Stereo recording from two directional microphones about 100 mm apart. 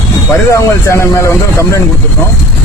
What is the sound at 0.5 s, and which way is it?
Speech, 30° left (ahead or behind).